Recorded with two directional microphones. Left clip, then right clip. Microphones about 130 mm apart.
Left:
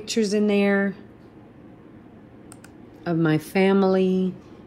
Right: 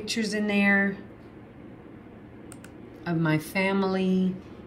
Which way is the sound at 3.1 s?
40° left (ahead or behind).